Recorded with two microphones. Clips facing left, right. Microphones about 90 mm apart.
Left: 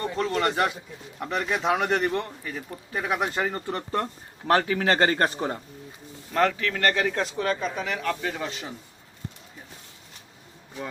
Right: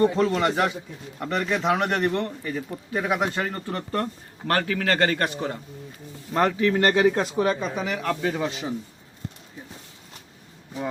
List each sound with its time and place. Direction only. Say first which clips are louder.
0.2 s a man's voice: right 3 dB; 5° right (ahead or behind); by 5.5 s 35° left (ahead or behind)
6.3 s speech: right 3 dB; 20° right (ahead or behind)